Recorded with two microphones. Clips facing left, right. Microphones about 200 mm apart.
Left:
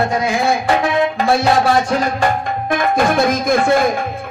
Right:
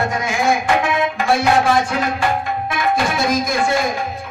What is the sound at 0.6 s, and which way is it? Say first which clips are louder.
Music: left 2 dB; 35° left (ahead or behind).